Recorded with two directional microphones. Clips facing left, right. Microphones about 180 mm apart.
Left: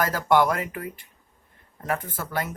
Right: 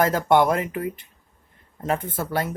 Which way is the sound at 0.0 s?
25° right (ahead or behind).